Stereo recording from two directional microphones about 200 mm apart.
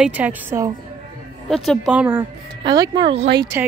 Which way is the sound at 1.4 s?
Centre (ahead or behind).